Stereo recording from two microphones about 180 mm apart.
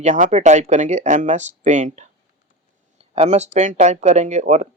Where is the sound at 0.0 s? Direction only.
40° right (ahead or behind).